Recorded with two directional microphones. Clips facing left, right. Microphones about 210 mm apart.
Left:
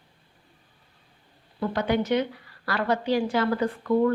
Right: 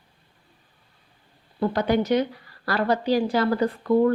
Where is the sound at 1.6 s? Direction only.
35° right (ahead or behind).